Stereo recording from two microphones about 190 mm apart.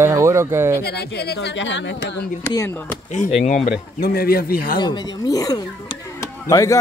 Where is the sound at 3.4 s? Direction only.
40° left (ahead or behind).